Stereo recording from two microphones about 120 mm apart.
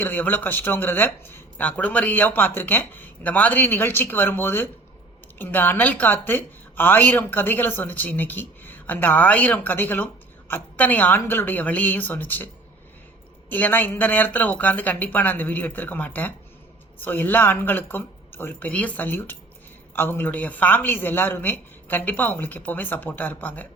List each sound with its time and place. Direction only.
0.0 s speech: 15° left (ahead or behind)
13.5 s speech: 15° left (ahead or behind)